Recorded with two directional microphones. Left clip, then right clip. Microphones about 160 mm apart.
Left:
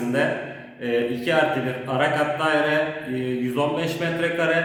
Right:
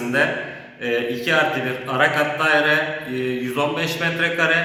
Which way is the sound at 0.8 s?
25° left (ahead or behind).